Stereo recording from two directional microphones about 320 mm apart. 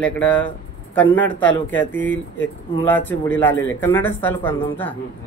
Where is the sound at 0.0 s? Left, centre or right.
Centre.